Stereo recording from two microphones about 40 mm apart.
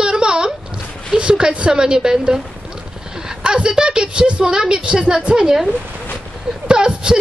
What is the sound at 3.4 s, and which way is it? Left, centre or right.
A woman's voice, right.